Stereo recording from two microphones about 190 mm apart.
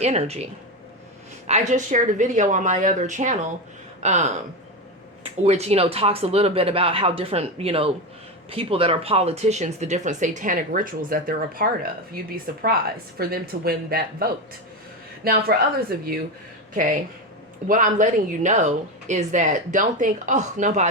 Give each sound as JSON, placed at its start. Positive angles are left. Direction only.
{"t": 0.0, "sound": "speech", "side_deg": -35}
{"t": 1.5, "sound": "a woman's voice", "side_deg": -35}